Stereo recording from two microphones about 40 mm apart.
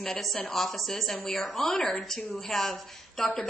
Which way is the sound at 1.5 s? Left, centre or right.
Centre.